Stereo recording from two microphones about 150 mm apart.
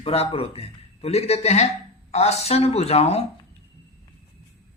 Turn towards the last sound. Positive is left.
turn(degrees=45)  # may be behind; listen again after turning